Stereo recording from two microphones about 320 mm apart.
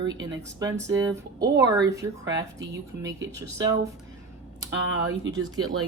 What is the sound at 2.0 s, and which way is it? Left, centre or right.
Speech, centre.